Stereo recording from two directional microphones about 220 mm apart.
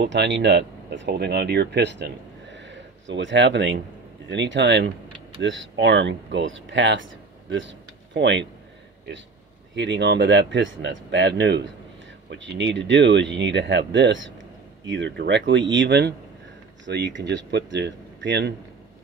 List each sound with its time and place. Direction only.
0.0 s speech: 55° right (ahead or behind)
9.8 s speech: 55° right (ahead or behind)